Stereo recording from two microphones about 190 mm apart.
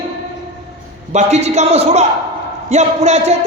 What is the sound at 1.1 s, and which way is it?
Speech, 35° right (ahead or behind).